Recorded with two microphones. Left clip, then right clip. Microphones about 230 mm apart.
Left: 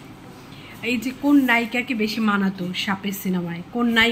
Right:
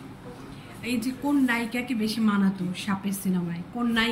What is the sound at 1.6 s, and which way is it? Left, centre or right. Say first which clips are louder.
A woman's voice: left 7 dB; centre.